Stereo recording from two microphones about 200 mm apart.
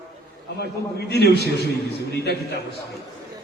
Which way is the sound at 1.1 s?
55° left (ahead or behind).